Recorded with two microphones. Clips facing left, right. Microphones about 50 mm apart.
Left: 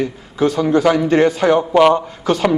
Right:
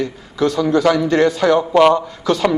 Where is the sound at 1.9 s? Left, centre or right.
Left.